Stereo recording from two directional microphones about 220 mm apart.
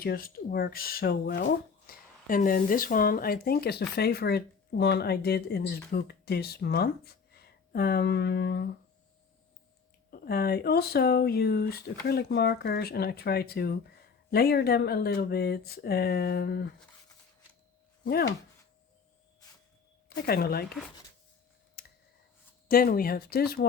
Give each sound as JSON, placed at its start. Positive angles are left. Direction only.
{"t": 0.0, "sound": "speech", "side_deg": 45}
{"t": 10.1, "sound": "speech", "side_deg": 45}
{"t": 18.0, "sound": "speech", "side_deg": 50}
{"t": 20.1, "sound": "speech", "side_deg": 45}
{"t": 21.8, "sound": "clicking", "side_deg": 45}
{"t": 22.7, "sound": "speech", "side_deg": 40}